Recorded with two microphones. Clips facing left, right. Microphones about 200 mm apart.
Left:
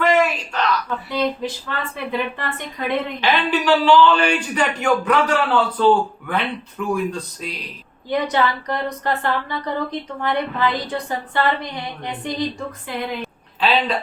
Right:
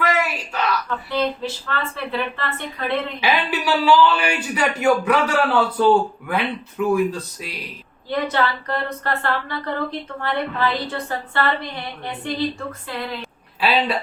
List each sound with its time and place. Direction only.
0.0 s a sound: 5° right (ahead or behind)
1.1 s a woman's voice: 15° left (ahead or behind)
3.2 s a man's voice: 10° right (ahead or behind)
8.1 s a woman's voice: 15° left (ahead or behind)
13.6 s a man's voice: 10° right (ahead or behind)